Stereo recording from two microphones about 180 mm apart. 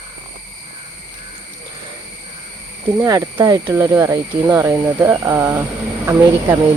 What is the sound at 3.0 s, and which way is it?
Speech, 20° right (ahead or behind).